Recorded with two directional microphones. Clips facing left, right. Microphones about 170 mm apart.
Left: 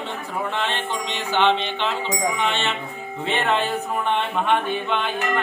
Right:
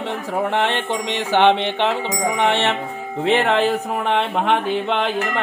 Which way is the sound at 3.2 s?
90° right.